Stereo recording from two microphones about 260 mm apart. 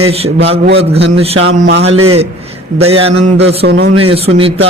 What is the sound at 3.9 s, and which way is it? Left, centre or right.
Speech, right.